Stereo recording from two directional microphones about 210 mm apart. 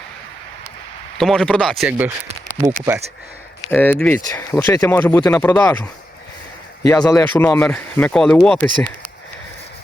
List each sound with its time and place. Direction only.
1.2 s speech: 5° left (ahead or behind)
2.2 s a sound: 35° right (ahead or behind)
3.7 s speech: 10° left (ahead or behind)